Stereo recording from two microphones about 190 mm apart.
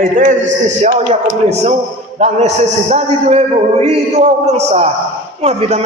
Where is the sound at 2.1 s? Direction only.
35° right (ahead or behind).